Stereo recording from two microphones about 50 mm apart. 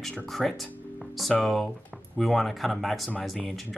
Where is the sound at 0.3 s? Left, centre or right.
Centre.